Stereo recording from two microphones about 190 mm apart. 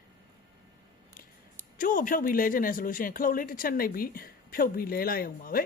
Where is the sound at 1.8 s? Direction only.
45° left (ahead or behind).